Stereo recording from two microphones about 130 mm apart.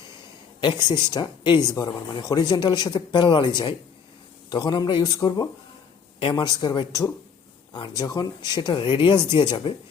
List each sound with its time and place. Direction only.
0.6 s speech: 35° left (ahead or behind)